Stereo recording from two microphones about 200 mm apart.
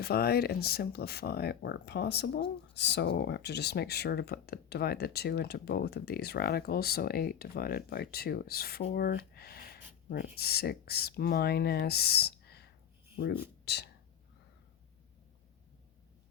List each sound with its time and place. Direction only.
0.0 s speech: 50° left (ahead or behind)
8.9 s a sound: 50° left (ahead or behind)
10.3 s speech: 50° left (ahead or behind)
13.7 s speech: 55° left (ahead or behind)